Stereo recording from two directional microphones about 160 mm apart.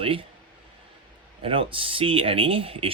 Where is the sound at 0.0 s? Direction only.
35° right (ahead or behind).